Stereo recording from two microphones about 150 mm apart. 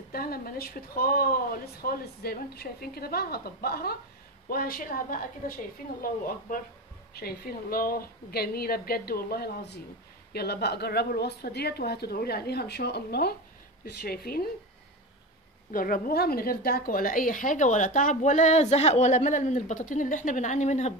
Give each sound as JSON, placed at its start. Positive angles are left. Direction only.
{"t": 0.1, "sound": "speech", "side_deg": 85}
{"t": 4.5, "sound": "a woman's voice", "side_deg": 80}
{"t": 7.2, "sound": "a woman's voice", "side_deg": 85}
{"t": 15.7, "sound": "a woman's voice", "side_deg": 70}